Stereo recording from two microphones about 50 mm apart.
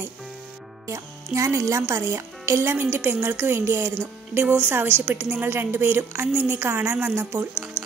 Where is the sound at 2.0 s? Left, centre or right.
Right.